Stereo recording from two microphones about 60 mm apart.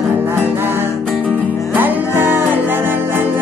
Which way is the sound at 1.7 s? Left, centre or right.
Right.